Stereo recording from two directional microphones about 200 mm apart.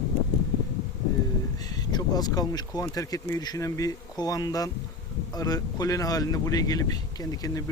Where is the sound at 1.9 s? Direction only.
20° left (ahead or behind).